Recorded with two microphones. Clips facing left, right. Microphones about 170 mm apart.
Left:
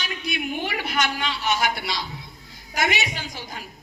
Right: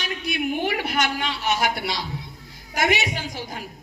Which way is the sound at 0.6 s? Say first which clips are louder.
Right 2 dB; 35° right (ahead or behind).